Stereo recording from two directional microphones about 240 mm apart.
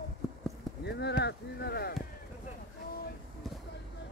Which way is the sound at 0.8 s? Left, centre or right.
Left.